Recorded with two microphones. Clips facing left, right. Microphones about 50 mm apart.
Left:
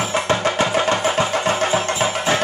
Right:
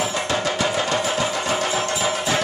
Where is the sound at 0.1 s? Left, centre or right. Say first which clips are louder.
Left 4 dB; left.